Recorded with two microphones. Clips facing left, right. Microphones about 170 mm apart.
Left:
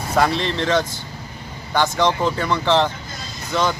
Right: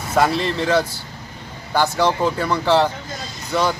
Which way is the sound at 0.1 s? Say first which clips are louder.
Right 1 dB; 5° right (ahead or behind).